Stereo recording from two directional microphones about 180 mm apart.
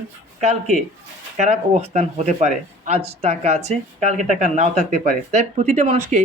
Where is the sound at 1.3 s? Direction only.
40° right (ahead or behind).